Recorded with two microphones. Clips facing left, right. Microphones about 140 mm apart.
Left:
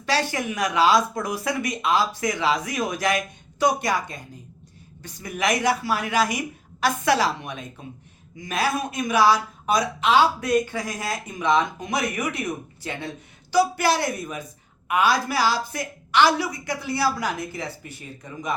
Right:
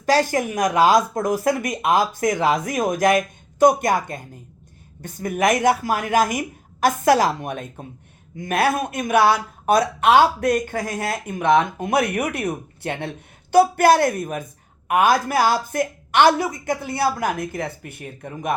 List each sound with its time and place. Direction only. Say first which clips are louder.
0.0 s speech: right 6 dB; 45° right (ahead or behind)